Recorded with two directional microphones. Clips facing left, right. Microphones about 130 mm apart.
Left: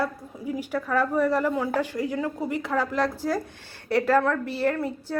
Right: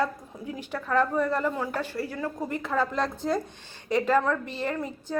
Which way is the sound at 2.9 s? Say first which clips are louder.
Left 2 dB; 20° right (ahead or behind).